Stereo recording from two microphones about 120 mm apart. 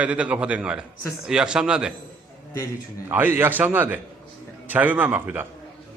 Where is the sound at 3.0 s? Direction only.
15° right (ahead or behind).